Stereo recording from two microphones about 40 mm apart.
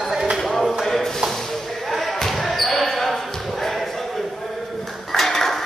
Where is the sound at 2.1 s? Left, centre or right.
Centre.